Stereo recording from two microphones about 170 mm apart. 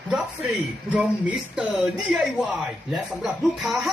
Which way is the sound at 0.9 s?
10° right (ahead or behind).